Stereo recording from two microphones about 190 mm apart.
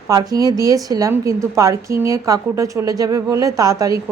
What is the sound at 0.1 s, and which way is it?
A woman's voice, 20° right (ahead or behind).